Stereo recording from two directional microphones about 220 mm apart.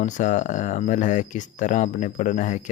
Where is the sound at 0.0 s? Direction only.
35° left (ahead or behind).